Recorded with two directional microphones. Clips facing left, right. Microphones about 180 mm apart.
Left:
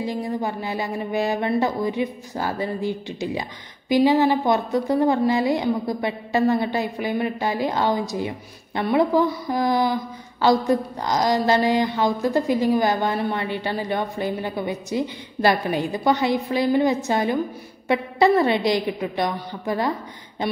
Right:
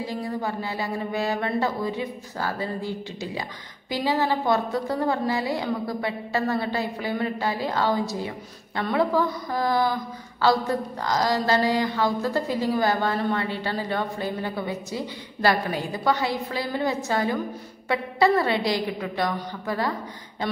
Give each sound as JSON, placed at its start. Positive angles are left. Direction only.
{"t": 0.0, "sound": "a woman's voice", "side_deg": 20}